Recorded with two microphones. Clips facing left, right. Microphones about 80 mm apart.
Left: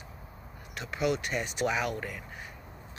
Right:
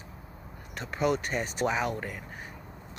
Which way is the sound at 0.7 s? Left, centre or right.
Right.